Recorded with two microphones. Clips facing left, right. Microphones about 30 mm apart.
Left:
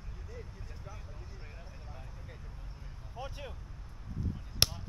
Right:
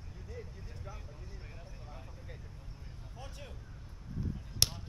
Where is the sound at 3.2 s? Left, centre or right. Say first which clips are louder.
Left 7 dB; left.